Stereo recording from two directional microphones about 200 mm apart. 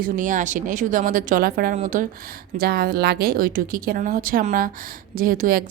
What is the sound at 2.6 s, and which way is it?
A woman's voice, 50° right (ahead or behind).